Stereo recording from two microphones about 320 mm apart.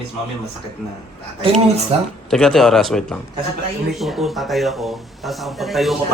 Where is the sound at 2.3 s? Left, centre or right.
Centre.